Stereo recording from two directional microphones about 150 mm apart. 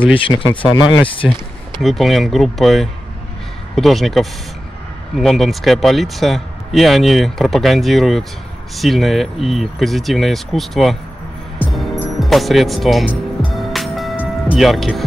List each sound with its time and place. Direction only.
0.2 s speech: 35° left (ahead or behind)
1.8 s speech: centre (ahead or behind)
11.7 s music: centre (ahead or behind)
14.2 s speech: 5° right (ahead or behind)